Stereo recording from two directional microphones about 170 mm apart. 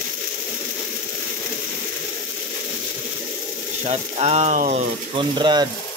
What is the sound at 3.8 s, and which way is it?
Ratchet, 40° right (ahead or behind).